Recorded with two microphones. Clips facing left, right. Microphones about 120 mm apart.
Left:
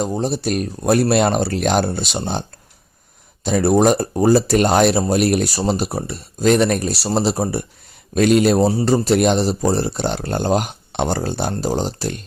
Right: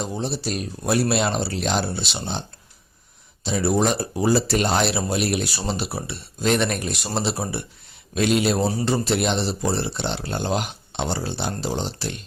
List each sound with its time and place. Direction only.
0.0 s speech: 45° left (ahead or behind)
3.4 s speech: 50° left (ahead or behind)
8.5 s speech: 35° left (ahead or behind)